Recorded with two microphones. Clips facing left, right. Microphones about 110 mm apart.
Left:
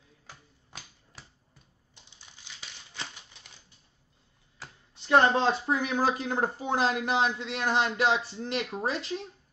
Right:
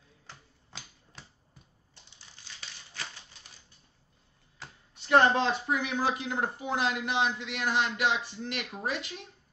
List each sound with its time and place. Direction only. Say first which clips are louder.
2.4 s crumpling: even; 15° left (ahead or behind)
5.0 s speech: left 1 dB; 25° left (ahead or behind)